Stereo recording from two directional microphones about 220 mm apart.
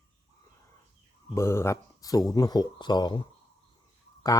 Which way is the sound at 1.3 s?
10° left (ahead or behind).